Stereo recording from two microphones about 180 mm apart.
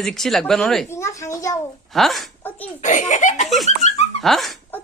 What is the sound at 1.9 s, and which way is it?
Speech, centre (ahead or behind).